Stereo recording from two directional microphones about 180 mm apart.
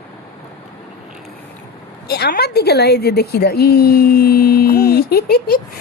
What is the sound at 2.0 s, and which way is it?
A woman's voice, 60° left (ahead or behind).